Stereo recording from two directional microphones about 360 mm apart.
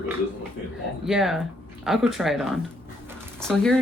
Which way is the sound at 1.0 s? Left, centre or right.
Centre.